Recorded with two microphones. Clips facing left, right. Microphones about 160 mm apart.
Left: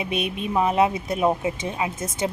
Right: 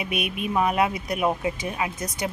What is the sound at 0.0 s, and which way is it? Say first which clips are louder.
A woman's voice: left 2 dB; 25° left (ahead or behind).